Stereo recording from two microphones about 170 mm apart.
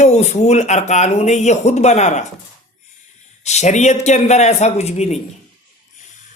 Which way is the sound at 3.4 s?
40° left (ahead or behind).